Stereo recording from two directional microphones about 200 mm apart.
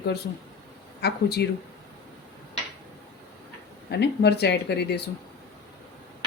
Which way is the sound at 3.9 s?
55° left (ahead or behind).